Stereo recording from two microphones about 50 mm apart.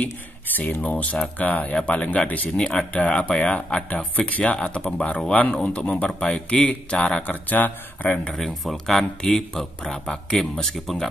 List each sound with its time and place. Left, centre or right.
0.0 s speech: left
0.8 s a man's voice: left
2.2 s a man's voice: left
2.5 s speech: centre
2.9 s speech: left
6.1 s speech: centre
7.2 s a man's voice: left
8.3 s speech: centre